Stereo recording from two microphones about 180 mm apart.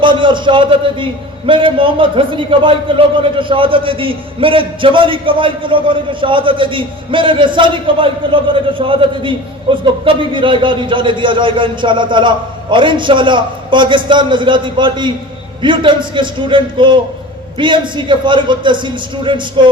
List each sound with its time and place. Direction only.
0.0 s a man's voice: 25° right (ahead or behind)